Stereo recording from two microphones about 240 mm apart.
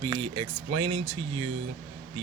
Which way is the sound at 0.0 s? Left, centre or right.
Right.